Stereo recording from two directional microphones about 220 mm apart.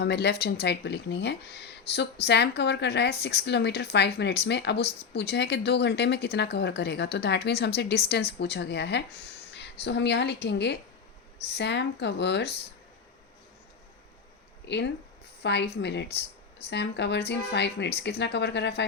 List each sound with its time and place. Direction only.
0.0 s a woman's voice: 50° left (ahead or behind)
14.6 s a woman's voice: 50° left (ahead or behind)